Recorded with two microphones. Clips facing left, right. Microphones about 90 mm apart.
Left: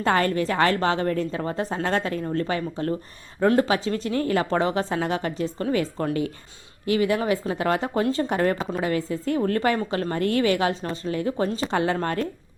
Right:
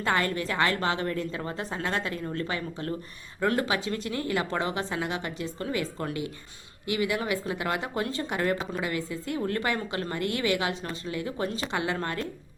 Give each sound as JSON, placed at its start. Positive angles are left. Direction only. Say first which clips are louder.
{"t": 0.0, "sound": "speech", "louder": "left 5 dB", "side_deg": 35}